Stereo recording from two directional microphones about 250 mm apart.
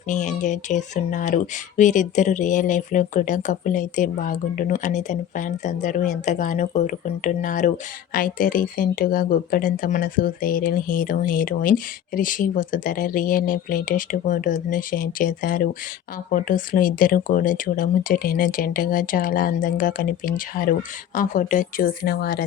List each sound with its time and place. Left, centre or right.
0.1 s speech: left